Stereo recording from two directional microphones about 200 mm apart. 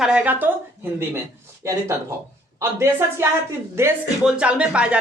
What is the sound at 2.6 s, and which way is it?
Speech, 10° right (ahead or behind).